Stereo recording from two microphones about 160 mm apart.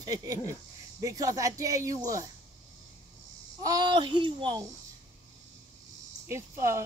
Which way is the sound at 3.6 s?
25° right (ahead or behind).